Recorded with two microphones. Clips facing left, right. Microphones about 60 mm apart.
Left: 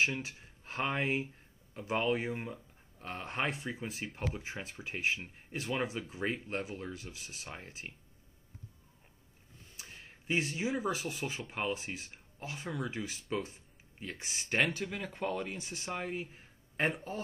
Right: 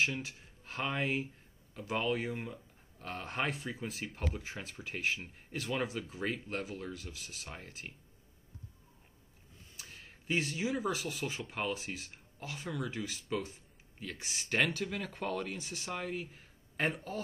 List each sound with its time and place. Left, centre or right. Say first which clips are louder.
0.0 s speech: left 1 dB; left
9.8 s a sound: left 1 dB; centre
10.4 s speech: even; centre
12.6 s speech: even; centre
14.5 s speech: even; centre